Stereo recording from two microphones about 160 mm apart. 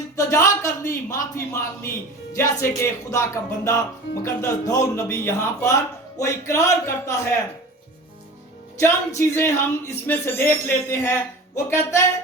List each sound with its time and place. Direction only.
0.2 s speech: 20° left (ahead or behind)
8.8 s speech: 15° left (ahead or behind)